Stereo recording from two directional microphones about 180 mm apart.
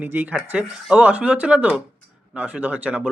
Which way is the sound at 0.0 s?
10° right (ahead or behind).